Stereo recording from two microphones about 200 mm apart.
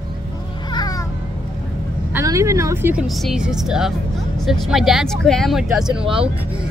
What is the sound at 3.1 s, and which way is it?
Speech, centre (ahead or behind).